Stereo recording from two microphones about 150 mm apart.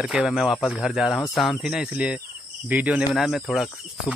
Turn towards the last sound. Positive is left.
turn(degrees=0)  # may be behind; listen again after turning